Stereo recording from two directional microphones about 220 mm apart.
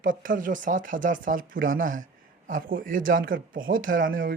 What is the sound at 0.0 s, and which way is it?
Speech, 40° right (ahead or behind).